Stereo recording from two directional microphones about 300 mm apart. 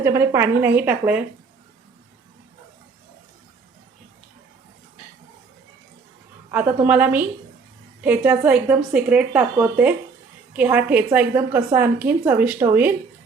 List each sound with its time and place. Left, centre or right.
0.0 s a woman's voice: centre
6.5 s a woman's voice: centre